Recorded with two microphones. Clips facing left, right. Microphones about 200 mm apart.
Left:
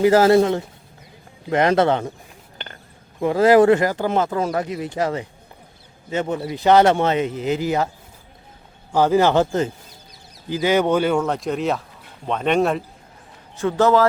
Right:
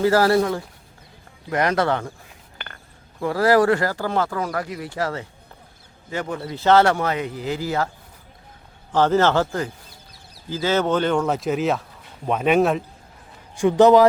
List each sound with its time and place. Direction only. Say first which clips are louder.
0.0 s speech: left 4 dB; 20° left (ahead or behind)
3.2 s speech: left 4 dB; 20° left (ahead or behind)
8.9 s a man's voice: left 2 dB; 10° left (ahead or behind)
11.3 s speech: right 1 dB; 5° right (ahead or behind)
13.6 s speech: right 3 dB; 15° right (ahead or behind)